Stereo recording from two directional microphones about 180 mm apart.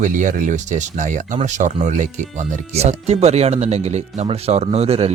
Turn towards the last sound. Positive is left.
turn(degrees=-35)  # may be behind; listen again after turning